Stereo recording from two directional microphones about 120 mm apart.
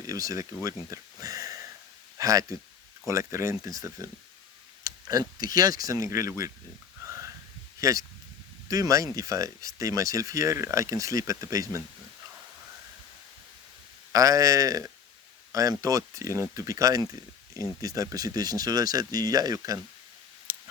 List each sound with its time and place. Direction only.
0.0 s speech: 30° right (ahead or behind)
7.0 s sniff: 25° right (ahead or behind)
7.8 s speech: 30° right (ahead or behind)
14.1 s speech: 30° right (ahead or behind)
20.5 s a sound: 15° right (ahead or behind)